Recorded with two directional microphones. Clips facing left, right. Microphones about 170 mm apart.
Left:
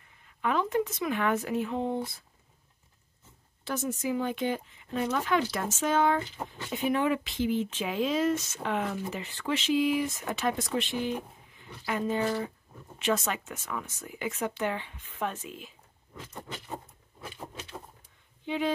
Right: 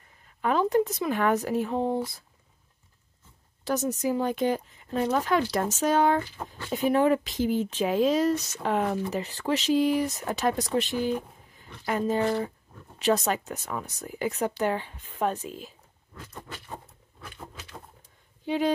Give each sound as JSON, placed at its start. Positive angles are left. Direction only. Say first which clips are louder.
{"t": 0.4, "sound": "speech", "louder": "right 4 dB", "side_deg": -35}
{"t": 3.6, "sound": "speech", "louder": "right 5 dB", "side_deg": -40}
{"t": 16.8, "sound": "a sound", "louder": "left 2 dB", "side_deg": 25}
{"t": 18.4, "sound": "speech", "louder": "right 4 dB", "side_deg": -40}